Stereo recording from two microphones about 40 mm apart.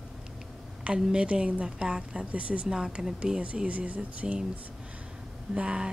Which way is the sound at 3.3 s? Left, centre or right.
Right.